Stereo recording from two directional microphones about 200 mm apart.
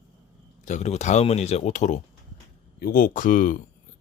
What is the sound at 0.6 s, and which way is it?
Speech, 35° left (ahead or behind).